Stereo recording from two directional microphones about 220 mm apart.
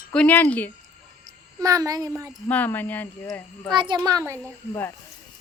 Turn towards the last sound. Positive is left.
turn(degrees=10)  # may be behind; listen again after turning